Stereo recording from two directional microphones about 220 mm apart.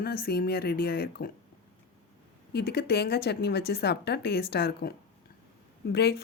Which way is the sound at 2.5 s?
50° left (ahead or behind).